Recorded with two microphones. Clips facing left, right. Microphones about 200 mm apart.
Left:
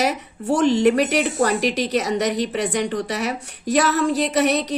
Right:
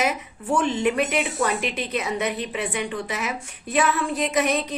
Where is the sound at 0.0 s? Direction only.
40° left (ahead or behind).